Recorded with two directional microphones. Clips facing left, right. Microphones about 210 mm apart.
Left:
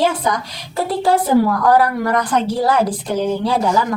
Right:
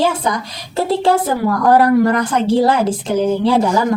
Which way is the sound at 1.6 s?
25° right (ahead or behind).